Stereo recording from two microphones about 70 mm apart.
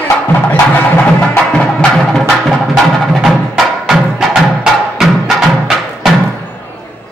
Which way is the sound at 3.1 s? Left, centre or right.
Centre.